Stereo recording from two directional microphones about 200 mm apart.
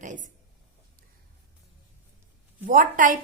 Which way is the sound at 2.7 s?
40° right (ahead or behind).